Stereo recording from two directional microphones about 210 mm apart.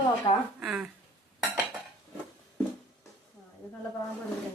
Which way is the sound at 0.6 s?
5° right (ahead or behind).